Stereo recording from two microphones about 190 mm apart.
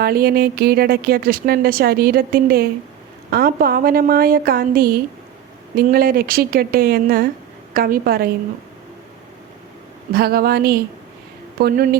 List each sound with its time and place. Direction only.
0.0 s a woman's voice: 50° right (ahead or behind)
10.1 s a woman's voice: 55° right (ahead or behind)